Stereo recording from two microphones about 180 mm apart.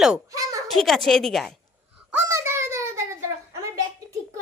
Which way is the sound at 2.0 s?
15° right (ahead or behind).